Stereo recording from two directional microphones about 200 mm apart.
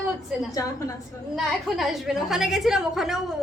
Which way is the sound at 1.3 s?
Centre (ahead or behind).